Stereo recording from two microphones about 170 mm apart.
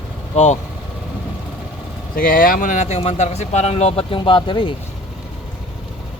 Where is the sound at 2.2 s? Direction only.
55° left (ahead or behind); by 4.7 s 30° left (ahead or behind).